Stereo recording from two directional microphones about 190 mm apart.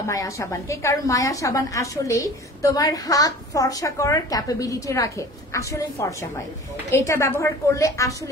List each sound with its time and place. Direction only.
0.1 s a woman's voice: 15° left (ahead or behind)